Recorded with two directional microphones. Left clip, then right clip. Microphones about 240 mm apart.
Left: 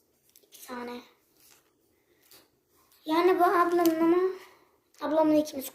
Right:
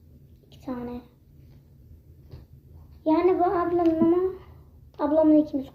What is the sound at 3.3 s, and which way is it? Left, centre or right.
Speech, left.